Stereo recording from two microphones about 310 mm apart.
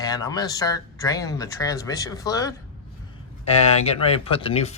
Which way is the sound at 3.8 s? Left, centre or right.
Centre.